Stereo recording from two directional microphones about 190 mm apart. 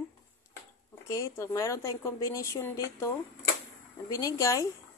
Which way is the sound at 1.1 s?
15° left (ahead or behind).